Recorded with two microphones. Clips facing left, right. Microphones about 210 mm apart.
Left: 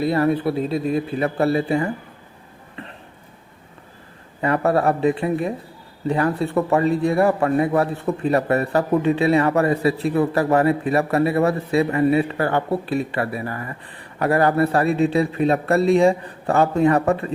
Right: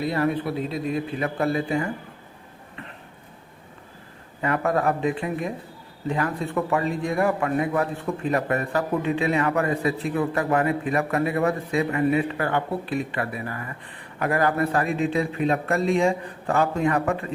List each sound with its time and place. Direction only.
0.0 s a man's voice: 35° left (ahead or behind)
4.4 s a man's voice: 35° left (ahead or behind)